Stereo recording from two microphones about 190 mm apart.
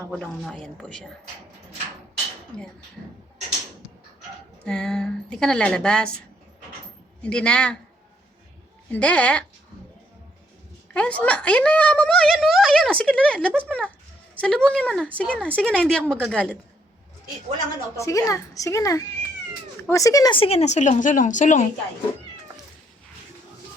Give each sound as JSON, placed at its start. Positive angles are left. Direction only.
{"t": 0.1, "sound": "speech", "side_deg": 5}
{"t": 4.6, "sound": "speech", "side_deg": 5}
{"t": 7.2, "sound": "speech", "side_deg": 5}
{"t": 8.9, "sound": "a woman's voice", "side_deg": 5}
{"t": 10.9, "sound": "speech", "side_deg": 5}
{"t": 17.9, "sound": "a woman's voice", "side_deg": 15}